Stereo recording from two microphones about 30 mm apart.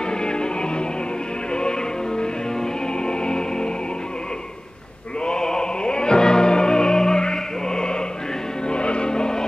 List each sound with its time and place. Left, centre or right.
0.2 s music: left
5.2 s music: left